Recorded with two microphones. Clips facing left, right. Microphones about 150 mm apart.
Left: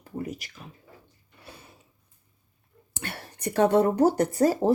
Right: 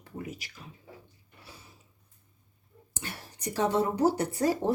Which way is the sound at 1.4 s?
60° left (ahead or behind).